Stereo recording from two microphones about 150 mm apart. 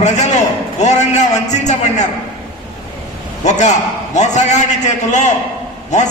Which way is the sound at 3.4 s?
50° left (ahead or behind).